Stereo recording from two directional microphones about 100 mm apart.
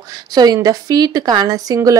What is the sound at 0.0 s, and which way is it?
A woman's voice, 40° right (ahead or behind).